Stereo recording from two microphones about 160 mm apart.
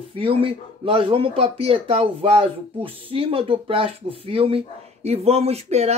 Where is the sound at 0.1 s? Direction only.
35° right (ahead or behind).